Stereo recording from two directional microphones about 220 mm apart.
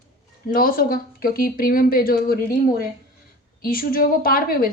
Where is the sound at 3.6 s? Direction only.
40° left (ahead or behind).